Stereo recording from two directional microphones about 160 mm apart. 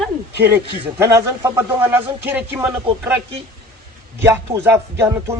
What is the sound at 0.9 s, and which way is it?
Speech, 20° right (ahead or behind).